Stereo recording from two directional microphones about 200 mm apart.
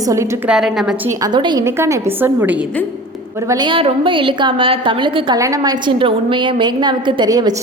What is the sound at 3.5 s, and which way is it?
A woman's voice, 25° right (ahead or behind).